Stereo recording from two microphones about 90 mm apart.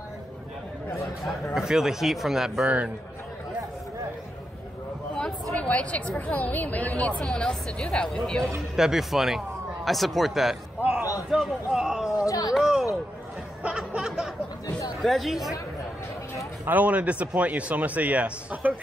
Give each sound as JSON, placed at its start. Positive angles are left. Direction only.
{"t": 1.5, "sound": "speech", "side_deg": -5}
{"t": 5.1, "sound": "a woman's voice", "side_deg": 10}
{"t": 8.7, "sound": "speech", "side_deg": -5}
{"t": 10.8, "sound": "a sound", "side_deg": -20}
{"t": 11.2, "sound": "speech", "side_deg": -5}
{"t": 12.3, "sound": "speech", "side_deg": 45}
{"t": 12.5, "sound": "a sound", "side_deg": -5}
{"t": 13.6, "sound": "music", "side_deg": -10}
{"t": 15.0, "sound": "speech", "side_deg": 0}
{"t": 16.6, "sound": "a man's voice", "side_deg": -15}